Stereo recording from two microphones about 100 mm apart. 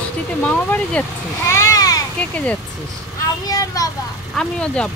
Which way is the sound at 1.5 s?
30° left (ahead or behind).